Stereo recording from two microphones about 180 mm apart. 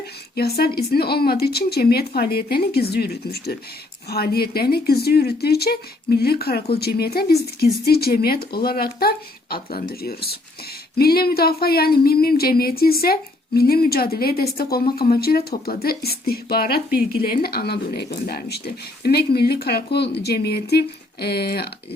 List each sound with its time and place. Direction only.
0.3 s speech: 60° left (ahead or behind)